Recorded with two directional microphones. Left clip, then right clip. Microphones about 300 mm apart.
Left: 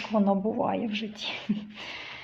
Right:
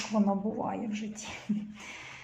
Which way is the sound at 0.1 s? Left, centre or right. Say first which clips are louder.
Left 6 dB; left.